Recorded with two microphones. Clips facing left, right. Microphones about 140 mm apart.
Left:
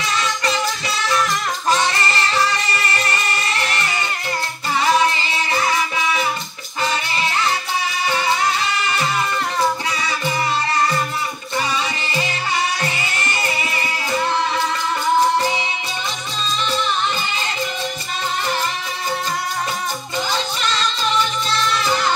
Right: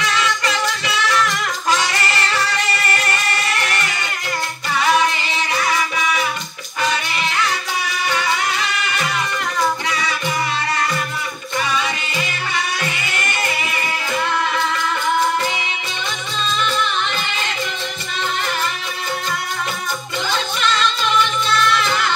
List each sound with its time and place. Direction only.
0.2 s music: 40° left (ahead or behind)
8.7 s music: 30° left (ahead or behind)
20.6 s music: 40° left (ahead or behind)